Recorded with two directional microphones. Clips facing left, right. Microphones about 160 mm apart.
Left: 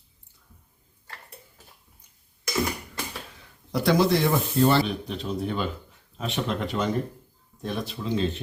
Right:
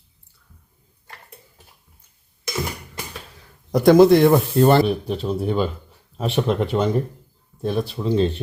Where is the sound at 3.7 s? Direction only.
50° right (ahead or behind).